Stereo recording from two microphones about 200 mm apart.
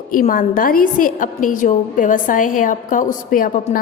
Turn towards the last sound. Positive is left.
turn(degrees=40)  # may be behind; listen again after turning